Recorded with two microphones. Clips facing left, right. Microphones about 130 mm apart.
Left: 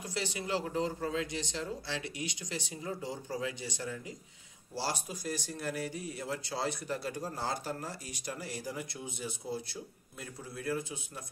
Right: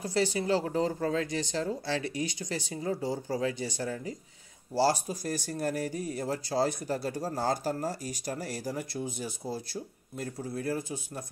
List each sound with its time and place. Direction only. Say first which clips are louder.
0.0 s speech: right 9 dB; 40° right (ahead or behind)